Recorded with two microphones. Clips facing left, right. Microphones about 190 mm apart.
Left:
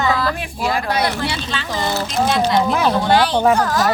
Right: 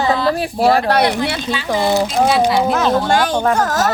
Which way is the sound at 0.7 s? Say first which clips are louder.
Right 4 dB; 60° right (ahead or behind).